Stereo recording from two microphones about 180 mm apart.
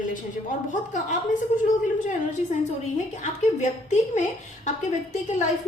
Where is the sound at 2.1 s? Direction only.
40° left (ahead or behind).